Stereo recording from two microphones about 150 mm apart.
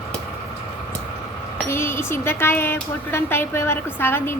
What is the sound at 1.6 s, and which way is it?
Speech, 15° left (ahead or behind).